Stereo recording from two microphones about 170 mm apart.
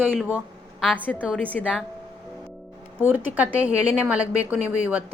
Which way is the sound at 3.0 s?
10° right (ahead or behind).